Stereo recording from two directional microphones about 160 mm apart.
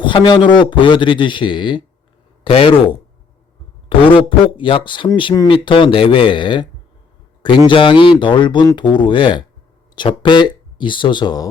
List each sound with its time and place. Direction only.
0.0 s a man's voice: 30° left (ahead or behind)
3.8 s a man's voice: 35° left (ahead or behind)
7.7 s a man's voice: 30° left (ahead or behind)